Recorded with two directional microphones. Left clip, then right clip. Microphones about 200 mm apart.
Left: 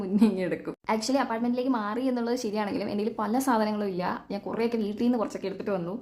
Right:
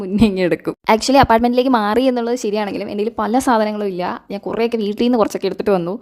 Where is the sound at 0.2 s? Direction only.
45° right (ahead or behind).